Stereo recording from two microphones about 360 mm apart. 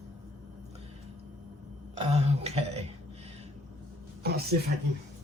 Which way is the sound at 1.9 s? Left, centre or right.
Centre.